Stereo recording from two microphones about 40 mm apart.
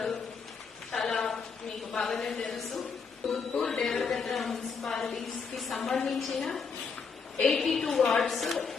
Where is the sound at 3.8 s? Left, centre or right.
Centre.